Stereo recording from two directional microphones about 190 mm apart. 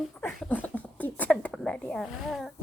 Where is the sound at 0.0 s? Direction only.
5° left (ahead or behind).